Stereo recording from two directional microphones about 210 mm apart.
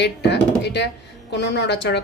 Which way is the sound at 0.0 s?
55° left (ahead or behind).